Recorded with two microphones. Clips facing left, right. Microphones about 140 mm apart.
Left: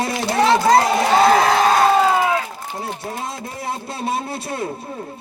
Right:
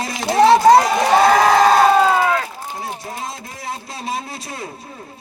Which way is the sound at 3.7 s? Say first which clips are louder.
Left 2 dB; 60° left (ahead or behind).